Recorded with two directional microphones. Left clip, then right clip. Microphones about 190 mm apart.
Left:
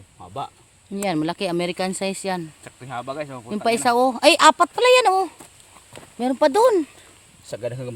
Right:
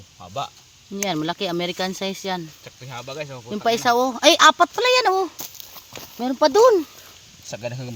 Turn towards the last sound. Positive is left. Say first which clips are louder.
# left 2 dB
turn(degrees=45)  # may be behind; listen again after turning